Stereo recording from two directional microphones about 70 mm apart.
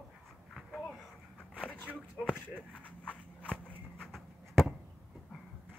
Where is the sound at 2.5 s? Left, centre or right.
Centre.